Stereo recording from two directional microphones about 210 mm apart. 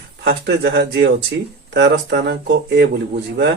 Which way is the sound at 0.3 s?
50° right (ahead or behind).